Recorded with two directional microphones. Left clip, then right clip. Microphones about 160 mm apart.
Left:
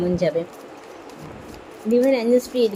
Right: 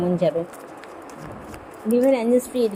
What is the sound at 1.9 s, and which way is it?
Speech, 5° right (ahead or behind).